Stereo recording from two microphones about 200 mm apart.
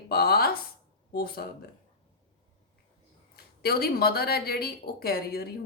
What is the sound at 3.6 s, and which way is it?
A woman's voice, 50° left (ahead or behind).